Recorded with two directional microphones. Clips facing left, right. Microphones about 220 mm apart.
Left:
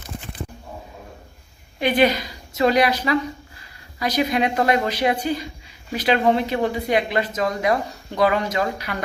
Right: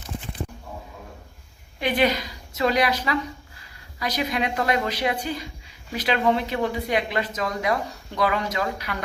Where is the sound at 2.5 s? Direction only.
40° left (ahead or behind).